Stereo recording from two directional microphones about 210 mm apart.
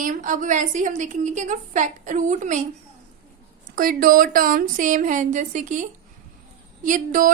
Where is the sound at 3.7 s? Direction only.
45° right (ahead or behind).